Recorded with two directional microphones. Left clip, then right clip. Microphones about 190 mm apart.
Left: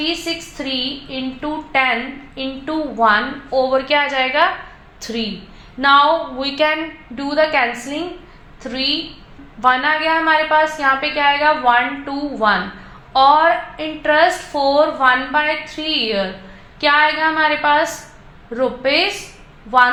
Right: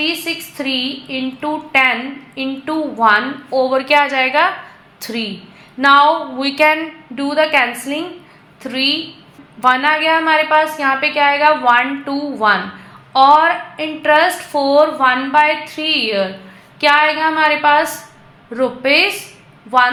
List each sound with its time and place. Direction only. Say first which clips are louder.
0.0 s a woman's voice: right 2 dB; 30° right (ahead or behind)
6.4 s a woman's voice: right 4 dB; 30° right (ahead or behind)